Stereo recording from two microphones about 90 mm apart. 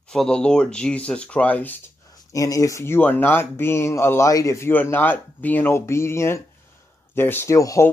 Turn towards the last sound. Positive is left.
turn(degrees=40)  # may be behind; listen again after turning